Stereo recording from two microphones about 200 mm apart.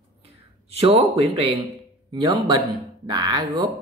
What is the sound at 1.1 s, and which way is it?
Speech, 30° right (ahead or behind).